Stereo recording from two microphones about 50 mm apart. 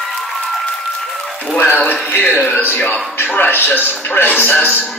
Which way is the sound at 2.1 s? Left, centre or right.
Left.